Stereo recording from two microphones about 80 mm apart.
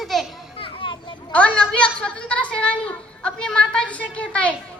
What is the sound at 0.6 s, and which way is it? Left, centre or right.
Children playing, left.